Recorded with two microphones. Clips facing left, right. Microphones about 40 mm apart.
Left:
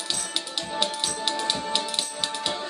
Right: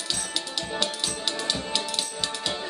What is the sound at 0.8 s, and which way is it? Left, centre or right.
Music, centre.